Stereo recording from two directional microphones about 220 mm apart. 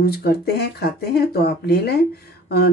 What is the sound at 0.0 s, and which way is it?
Speech, 45° left (ahead or behind).